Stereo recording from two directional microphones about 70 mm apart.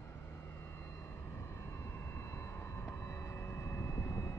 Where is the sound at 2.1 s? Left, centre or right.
Left.